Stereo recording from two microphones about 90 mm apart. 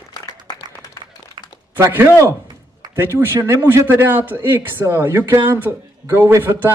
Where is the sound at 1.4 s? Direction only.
60° right (ahead or behind).